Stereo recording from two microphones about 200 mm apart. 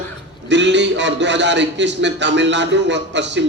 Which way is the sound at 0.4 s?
60° right (ahead or behind).